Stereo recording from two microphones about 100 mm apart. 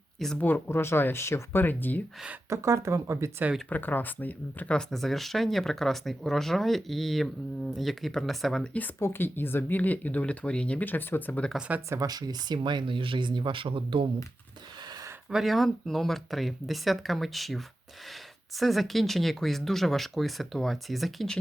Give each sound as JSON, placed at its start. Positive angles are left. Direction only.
{"t": 0.3, "sound": "speech", "side_deg": 20}
{"t": 2.5, "sound": "speech", "side_deg": -30}
{"t": 3.7, "sound": "speech", "side_deg": 20}
{"t": 9.0, "sound": "speech", "side_deg": 25}
{"t": 11.9, "sound": "speech", "side_deg": -40}
{"t": 15.3, "sound": "speech", "side_deg": 0}